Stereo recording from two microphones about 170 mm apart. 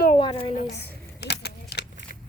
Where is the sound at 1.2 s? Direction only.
75° left (ahead or behind).